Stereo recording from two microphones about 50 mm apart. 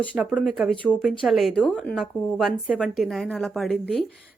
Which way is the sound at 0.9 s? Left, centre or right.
Left.